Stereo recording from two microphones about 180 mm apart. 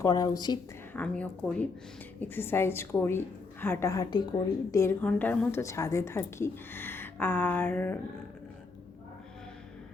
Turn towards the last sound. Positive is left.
turn(degrees=10)  # may be behind; listen again after turning